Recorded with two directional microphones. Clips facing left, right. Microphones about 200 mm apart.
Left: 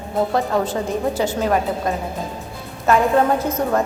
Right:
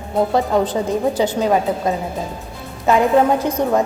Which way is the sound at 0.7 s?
20° right (ahead or behind).